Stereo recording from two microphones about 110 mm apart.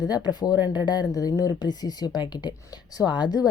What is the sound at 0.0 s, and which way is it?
A woman's voice, 40° left (ahead or behind).